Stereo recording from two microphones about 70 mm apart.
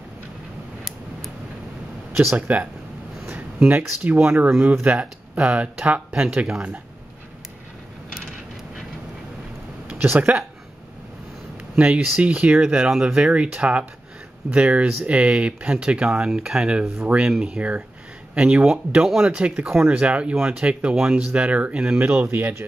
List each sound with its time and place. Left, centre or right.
2.3 s speech: right
9.8 s speech: right
11.7 s speech: centre
18.7 s speech: centre
21.3 s speech: right
22.0 s speech: right